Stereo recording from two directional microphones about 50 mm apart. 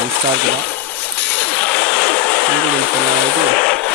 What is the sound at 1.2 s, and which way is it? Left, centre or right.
Vehicle, left.